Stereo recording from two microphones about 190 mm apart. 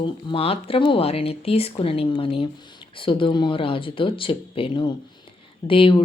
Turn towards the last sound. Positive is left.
turn(degrees=30)  # may be behind; listen again after turning